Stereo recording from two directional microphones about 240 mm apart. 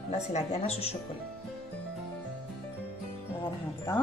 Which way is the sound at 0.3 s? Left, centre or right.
Left.